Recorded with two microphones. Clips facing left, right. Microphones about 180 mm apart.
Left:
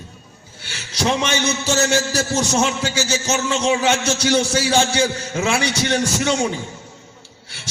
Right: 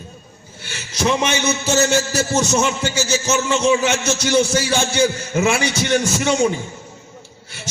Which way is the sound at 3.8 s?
45° right (ahead or behind).